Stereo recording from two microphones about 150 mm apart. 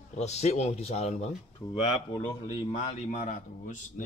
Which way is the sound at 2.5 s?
45° left (ahead or behind).